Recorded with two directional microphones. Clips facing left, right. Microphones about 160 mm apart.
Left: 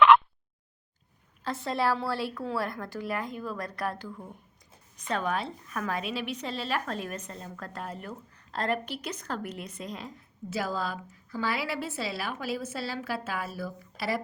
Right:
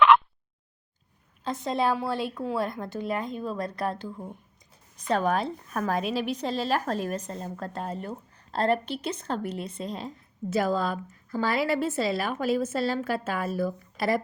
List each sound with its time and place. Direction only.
1.5 s a woman's voice: 20° right (ahead or behind)
4.9 s a woman's voice: 35° right (ahead or behind)
10.5 s a woman's voice: 50° right (ahead or behind)